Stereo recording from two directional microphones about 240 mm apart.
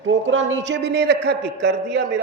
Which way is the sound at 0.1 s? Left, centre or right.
Right.